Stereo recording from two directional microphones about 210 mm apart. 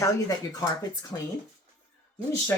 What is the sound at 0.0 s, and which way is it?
Speech, 15° left (ahead or behind).